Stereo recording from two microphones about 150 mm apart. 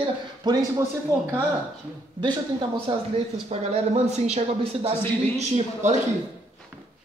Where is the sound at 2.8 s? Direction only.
40° right (ahead or behind).